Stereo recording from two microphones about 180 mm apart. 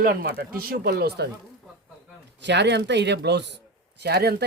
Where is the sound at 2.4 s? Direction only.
70° right (ahead or behind).